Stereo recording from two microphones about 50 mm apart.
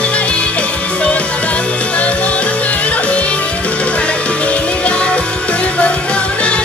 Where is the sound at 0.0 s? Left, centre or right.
Left.